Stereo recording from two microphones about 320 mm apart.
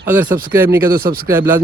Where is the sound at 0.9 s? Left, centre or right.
Right.